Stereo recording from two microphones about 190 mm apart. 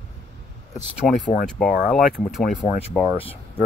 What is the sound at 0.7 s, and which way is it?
Speech, 40° left (ahead or behind).